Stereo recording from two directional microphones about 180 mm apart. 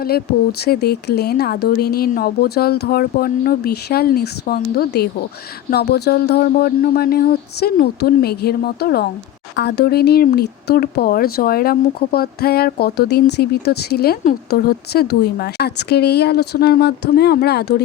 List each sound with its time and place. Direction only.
0.6 s speech: 60° left (ahead or behind)